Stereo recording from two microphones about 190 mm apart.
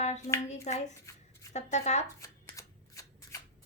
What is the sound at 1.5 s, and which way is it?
Speech, 35° left (ahead or behind).